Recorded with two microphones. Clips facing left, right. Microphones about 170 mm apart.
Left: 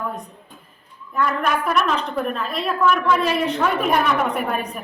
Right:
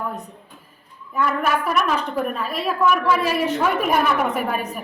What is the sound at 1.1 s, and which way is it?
A woman's voice, 5° right (ahead or behind).